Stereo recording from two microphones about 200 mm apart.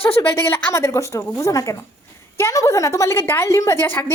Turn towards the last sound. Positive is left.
turn(degrees=10)  # may be behind; listen again after turning